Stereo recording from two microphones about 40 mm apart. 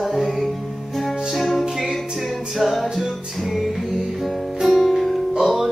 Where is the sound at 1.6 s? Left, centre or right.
Centre.